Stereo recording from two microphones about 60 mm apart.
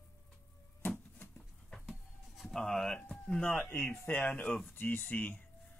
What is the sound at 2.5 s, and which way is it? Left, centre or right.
Speech, centre.